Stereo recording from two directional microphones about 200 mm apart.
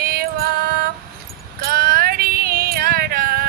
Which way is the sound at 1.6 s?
50° right (ahead or behind).